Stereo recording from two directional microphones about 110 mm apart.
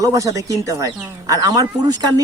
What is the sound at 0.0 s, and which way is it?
Speech, 30° right (ahead or behind).